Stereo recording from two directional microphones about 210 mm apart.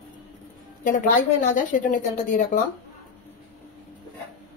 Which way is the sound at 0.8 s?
40° left (ahead or behind).